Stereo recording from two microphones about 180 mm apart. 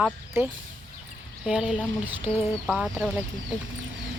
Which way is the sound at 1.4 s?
5° right (ahead or behind).